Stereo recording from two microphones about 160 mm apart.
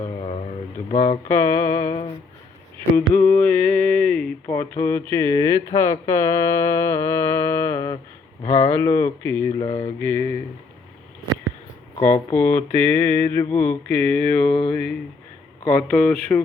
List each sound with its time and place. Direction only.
0.9 s speech: 40° left (ahead or behind)
1.3 s speech: 15° left (ahead or behind)
3.1 s speech: 15° left (ahead or behind)
9.6 s speech: 40° left (ahead or behind)
10.0 s speech: 15° left (ahead or behind)
11.9 s speech: 15° left (ahead or behind)